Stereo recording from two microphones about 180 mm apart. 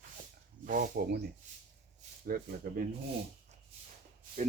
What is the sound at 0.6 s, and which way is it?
Speech, 55° right (ahead or behind).